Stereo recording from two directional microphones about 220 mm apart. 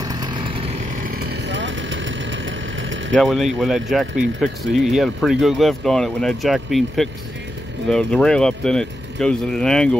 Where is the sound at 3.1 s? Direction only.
Centre (ahead or behind).